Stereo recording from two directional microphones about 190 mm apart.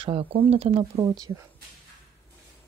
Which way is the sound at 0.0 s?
30° right (ahead or behind).